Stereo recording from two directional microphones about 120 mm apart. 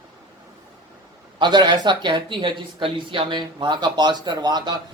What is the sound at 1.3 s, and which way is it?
Speech, 40° right (ahead or behind).